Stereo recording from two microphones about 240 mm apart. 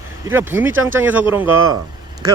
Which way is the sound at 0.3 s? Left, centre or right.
Centre.